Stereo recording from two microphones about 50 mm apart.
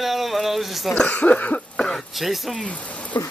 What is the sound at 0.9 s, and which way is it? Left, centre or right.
Speech, centre.